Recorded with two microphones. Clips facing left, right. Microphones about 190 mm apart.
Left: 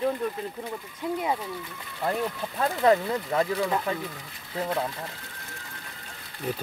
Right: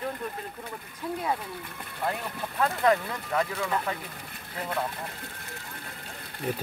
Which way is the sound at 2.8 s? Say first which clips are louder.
Left 5 dB; 30° left (ahead or behind).